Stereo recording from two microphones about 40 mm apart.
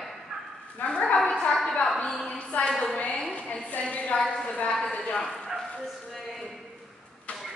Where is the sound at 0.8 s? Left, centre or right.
Left.